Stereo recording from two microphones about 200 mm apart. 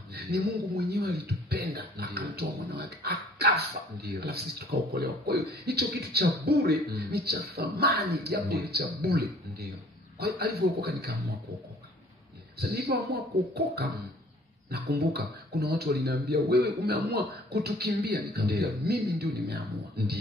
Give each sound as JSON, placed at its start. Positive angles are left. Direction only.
{"t": 0.1, "sound": "speech", "side_deg": -50}
{"t": 12.5, "sound": "speech", "side_deg": -50}